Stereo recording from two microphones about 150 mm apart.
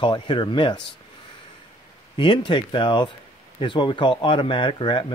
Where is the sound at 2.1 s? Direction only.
30° left (ahead or behind).